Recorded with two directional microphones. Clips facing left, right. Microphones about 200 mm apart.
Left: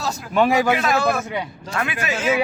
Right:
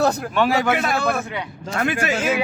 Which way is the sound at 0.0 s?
60° right (ahead or behind).